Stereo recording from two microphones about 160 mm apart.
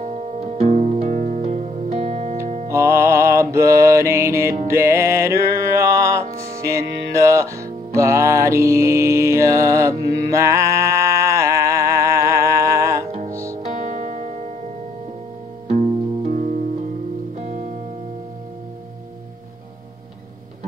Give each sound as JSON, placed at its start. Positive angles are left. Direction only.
{"t": 0.0, "sound": "music", "side_deg": -45}
{"t": 2.7, "sound": "mantra", "side_deg": -15}
{"t": 4.6, "sound": "music", "side_deg": -15}
{"t": 13.7, "sound": "music", "side_deg": -55}
{"t": 16.3, "sound": "music", "side_deg": -50}